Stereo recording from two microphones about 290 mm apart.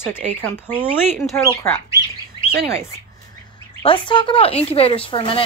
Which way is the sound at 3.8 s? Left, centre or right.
Centre.